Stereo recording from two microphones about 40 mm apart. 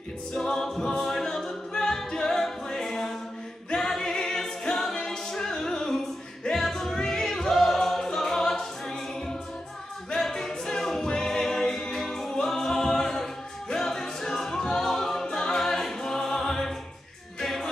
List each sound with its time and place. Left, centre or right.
0.3 s a capella: centre
6.4 s music: centre
10.1 s a capella: centre
15.3 s music: centre